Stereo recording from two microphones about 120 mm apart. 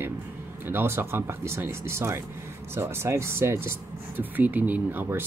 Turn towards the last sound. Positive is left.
turn(degrees=-20)  # may be behind; listen again after turning